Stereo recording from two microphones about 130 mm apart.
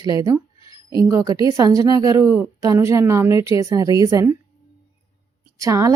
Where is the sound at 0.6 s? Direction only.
40° left (ahead or behind).